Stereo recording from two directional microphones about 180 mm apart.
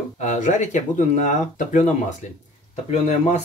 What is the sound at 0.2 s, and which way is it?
Speech, 45° left (ahead or behind).